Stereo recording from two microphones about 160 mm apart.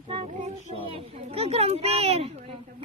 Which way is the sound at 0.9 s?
35° right (ahead or behind).